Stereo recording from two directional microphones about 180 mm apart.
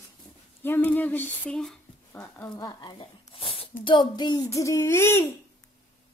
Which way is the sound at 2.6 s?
25° left (ahead or behind).